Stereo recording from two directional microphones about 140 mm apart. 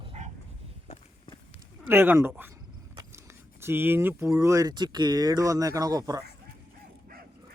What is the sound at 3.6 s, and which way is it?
Speech, 15° right (ahead or behind).